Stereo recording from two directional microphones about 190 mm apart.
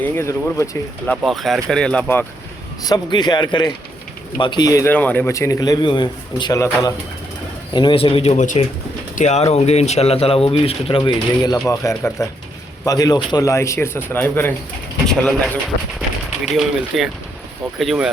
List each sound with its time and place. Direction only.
0.0 s a man's voice: 15° left (ahead or behind)
1.1 s speech: centre (ahead or behind)
2.8 s a man's voice: 20° left (ahead or behind)
7.7 s a man's voice: 25° left (ahead or behind); by 15.5 s 5° left (ahead or behind)
16.6 s speech: centre (ahead or behind)